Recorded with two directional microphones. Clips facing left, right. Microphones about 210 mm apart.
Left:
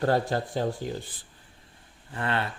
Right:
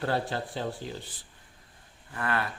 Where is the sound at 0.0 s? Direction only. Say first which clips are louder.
Left 5 dB; 45° left (ahead or behind).